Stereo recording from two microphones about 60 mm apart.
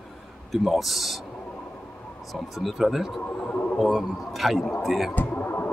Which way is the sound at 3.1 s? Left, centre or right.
Left.